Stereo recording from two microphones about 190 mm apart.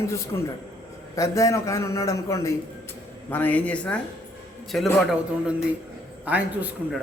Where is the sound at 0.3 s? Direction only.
15° left (ahead or behind).